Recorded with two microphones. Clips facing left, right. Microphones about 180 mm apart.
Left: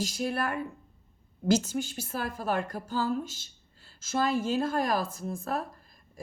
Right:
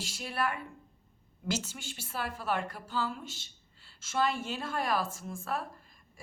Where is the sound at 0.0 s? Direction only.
40° left (ahead or behind).